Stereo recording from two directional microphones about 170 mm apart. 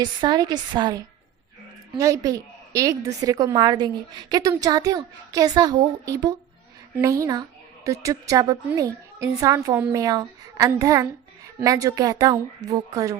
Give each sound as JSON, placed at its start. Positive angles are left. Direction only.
{"t": 0.0, "sound": "a woman's voice", "side_deg": -25}